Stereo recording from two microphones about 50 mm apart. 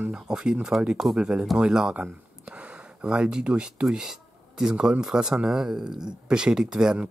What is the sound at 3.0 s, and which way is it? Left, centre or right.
Speech, centre.